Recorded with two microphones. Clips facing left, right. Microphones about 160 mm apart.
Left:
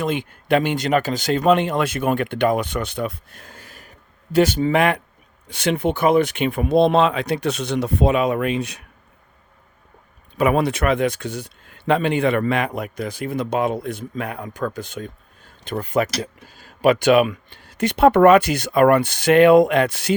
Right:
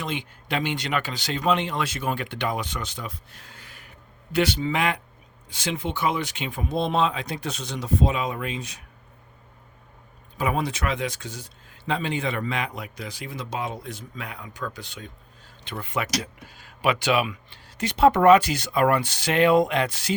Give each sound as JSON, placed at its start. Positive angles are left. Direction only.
{"t": 0.0, "sound": "speech", "side_deg": 50}
{"t": 10.3, "sound": "speech", "side_deg": 70}